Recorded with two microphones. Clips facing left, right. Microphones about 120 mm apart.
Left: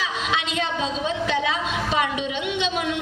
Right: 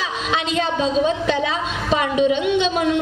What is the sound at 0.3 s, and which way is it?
A woman's voice, 35° right (ahead or behind).